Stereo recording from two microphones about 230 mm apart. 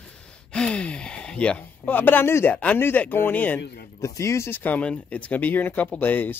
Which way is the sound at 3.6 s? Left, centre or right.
Left.